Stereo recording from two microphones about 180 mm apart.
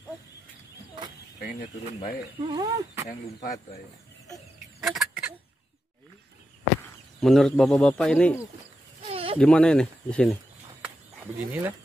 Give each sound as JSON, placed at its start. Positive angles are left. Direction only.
{"t": 2.4, "sound": "speech", "side_deg": -20}
{"t": 3.3, "sound": "speech", "side_deg": 45}
{"t": 4.8, "sound": "chicken", "side_deg": 0}
{"t": 7.2, "sound": "speech", "side_deg": 0}
{"t": 9.0, "sound": "a sound", "side_deg": -30}
{"t": 9.4, "sound": "speech", "side_deg": 5}
{"t": 11.3, "sound": "speech", "side_deg": -10}